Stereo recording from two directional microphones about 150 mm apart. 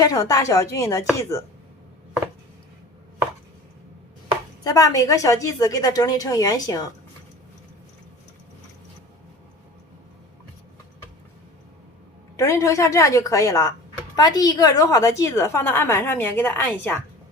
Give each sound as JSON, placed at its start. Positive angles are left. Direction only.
{"t": 0.0, "sound": "a woman's voice", "side_deg": 25}
{"t": 4.6, "sound": "a woman's voice", "side_deg": 25}
{"t": 12.4, "sound": "a woman's voice", "side_deg": 20}